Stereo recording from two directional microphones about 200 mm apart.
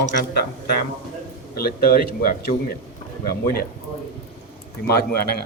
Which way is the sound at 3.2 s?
50° left (ahead or behind).